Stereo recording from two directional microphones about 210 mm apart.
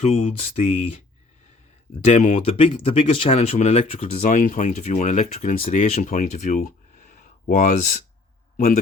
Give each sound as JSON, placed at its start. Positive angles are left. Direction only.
{"t": 0.0, "sound": "speech", "side_deg": 30}
{"t": 2.0, "sound": "a man's voice", "side_deg": 35}